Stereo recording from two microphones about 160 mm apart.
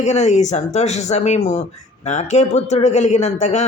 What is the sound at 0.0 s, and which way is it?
Speech, 45° left (ahead or behind).